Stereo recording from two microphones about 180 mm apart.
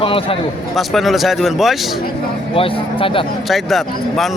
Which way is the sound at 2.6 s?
30° left (ahead or behind).